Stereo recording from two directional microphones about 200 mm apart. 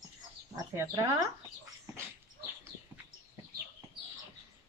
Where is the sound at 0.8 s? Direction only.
15° right (ahead or behind).